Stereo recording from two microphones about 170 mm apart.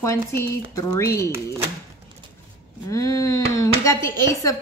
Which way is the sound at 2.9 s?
20° left (ahead or behind).